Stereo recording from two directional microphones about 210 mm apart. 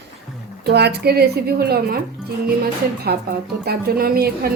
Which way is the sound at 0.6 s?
50° right (ahead or behind).